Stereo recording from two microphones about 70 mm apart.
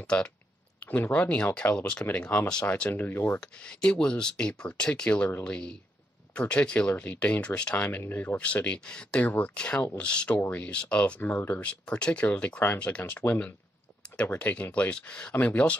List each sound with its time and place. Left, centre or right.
0.0 s speech: centre
0.8 s speech: left
3.3 s speech: centre
8.5 s speech: centre